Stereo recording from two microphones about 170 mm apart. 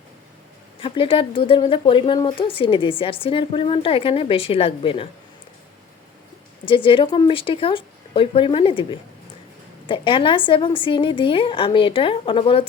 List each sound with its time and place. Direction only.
0.8 s speech: 30° left (ahead or behind)
6.7 s a woman's voice: 30° left (ahead or behind)